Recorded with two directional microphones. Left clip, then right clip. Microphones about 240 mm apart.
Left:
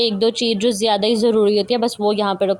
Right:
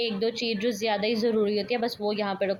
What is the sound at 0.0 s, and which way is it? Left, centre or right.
Speech, left.